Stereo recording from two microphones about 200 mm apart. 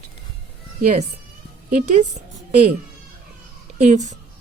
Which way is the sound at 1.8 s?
35° right (ahead or behind).